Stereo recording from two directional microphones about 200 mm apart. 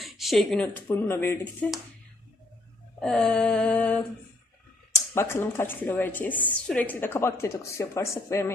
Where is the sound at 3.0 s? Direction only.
5° left (ahead or behind).